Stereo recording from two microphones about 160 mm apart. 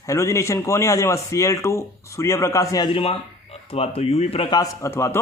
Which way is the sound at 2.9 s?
35° left (ahead or behind).